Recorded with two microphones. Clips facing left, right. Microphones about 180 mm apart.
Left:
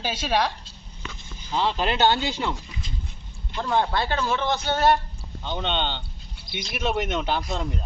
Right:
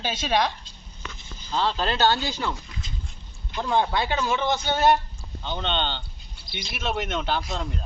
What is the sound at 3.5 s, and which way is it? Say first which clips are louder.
Speech: even; 10° right (ahead or behind).